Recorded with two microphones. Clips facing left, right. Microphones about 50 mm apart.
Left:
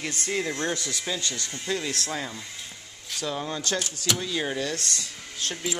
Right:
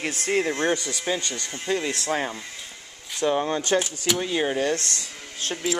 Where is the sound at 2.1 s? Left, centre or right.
Right.